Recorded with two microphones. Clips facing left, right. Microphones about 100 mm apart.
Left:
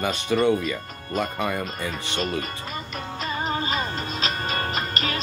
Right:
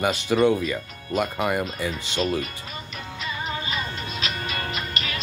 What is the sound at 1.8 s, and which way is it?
Speech, 40° left (ahead or behind).